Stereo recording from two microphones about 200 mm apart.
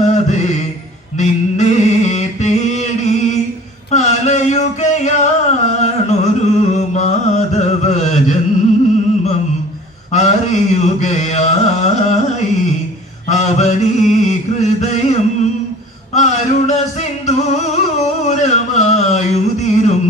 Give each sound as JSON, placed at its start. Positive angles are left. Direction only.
{"t": 0.0, "sound": "mantra", "side_deg": 35}
{"t": 1.2, "sound": "music", "side_deg": 35}
{"t": 10.1, "sound": "carnatic music", "side_deg": 35}
{"t": 13.3, "sound": "chant", "side_deg": 35}
{"t": 16.2, "sound": "a sound", "side_deg": 35}
{"t": 17.3, "sound": "music", "side_deg": 35}